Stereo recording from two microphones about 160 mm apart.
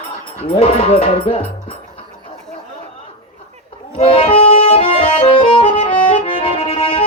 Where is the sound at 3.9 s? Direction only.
35° left (ahead or behind).